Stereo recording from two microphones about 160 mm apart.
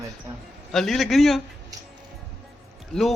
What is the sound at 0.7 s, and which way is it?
Speech, centre (ahead or behind).